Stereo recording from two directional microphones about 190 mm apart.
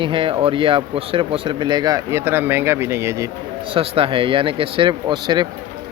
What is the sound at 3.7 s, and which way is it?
Speech, 30° right (ahead or behind).